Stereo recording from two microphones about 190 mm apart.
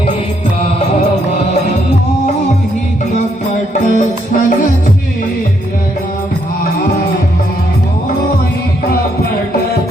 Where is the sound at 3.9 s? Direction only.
45° left (ahead or behind).